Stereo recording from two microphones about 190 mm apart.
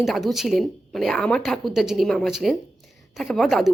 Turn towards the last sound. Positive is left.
turn(degrees=0)  # may be behind; listen again after turning